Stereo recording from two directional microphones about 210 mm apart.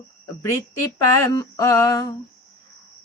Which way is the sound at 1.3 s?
15° left (ahead or behind).